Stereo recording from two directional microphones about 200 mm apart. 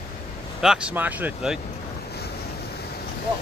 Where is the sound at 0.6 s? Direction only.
5° right (ahead or behind).